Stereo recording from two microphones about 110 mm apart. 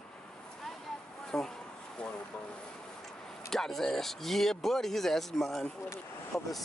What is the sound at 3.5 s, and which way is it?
Speech, 5° left (ahead or behind).